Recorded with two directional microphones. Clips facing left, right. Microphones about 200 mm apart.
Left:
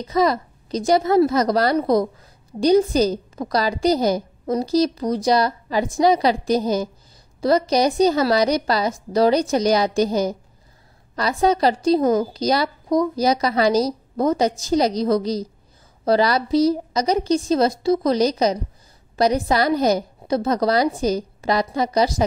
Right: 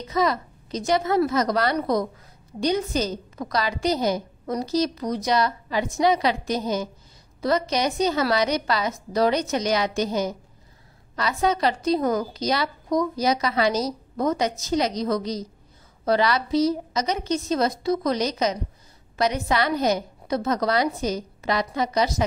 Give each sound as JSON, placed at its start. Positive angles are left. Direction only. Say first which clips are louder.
{"t": 0.1, "sound": "a woman's voice", "louder": "left 4 dB", "side_deg": 35}